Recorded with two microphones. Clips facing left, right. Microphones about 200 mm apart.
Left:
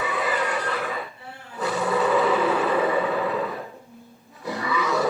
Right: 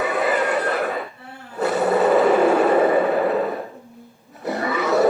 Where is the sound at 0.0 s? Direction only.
55° right (ahead or behind).